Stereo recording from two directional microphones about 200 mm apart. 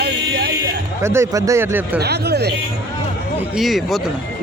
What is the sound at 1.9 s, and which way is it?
Speech, 55° right (ahead or behind).